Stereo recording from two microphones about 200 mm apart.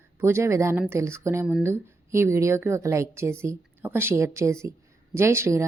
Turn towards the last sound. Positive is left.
turn(degrees=-15)  # may be behind; listen again after turning